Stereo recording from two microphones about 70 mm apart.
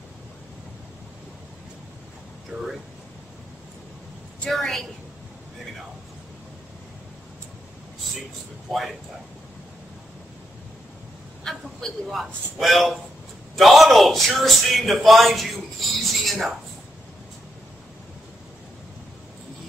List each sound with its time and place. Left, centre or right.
2.5 s speech: centre
4.5 s speech: centre
11.4 s speech: centre